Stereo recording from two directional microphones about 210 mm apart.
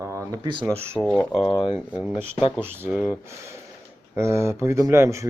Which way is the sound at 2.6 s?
10° right (ahead or behind).